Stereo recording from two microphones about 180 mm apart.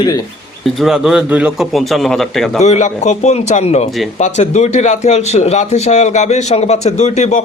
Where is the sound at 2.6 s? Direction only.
40° left (ahead or behind).